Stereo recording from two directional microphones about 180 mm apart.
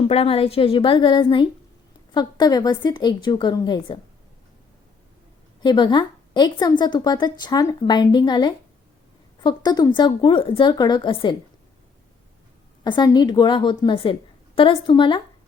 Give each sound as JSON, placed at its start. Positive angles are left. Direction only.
{"t": 0.1, "sound": "a woman's voice", "side_deg": 35}
{"t": 5.6, "sound": "a woman's voice", "side_deg": 25}
{"t": 12.8, "sound": "a woman's voice", "side_deg": 20}